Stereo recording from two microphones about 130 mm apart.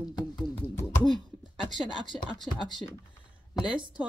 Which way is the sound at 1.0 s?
35° left (ahead or behind).